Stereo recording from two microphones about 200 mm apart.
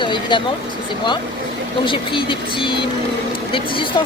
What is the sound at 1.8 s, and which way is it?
Speech, 25° left (ahead or behind).